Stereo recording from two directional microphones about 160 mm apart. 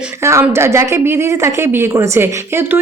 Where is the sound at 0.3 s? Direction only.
15° right (ahead or behind).